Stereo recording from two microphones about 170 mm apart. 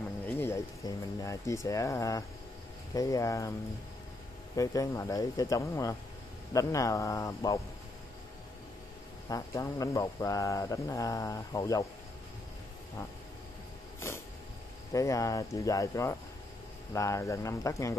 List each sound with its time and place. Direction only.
0.3 s speech: 15° left (ahead or behind)
4.6 s speech: 20° left (ahead or behind)
9.3 s speech: 20° left (ahead or behind)
13.9 s a sound: 15° left (ahead or behind)
14.9 s speech: 20° left (ahead or behind)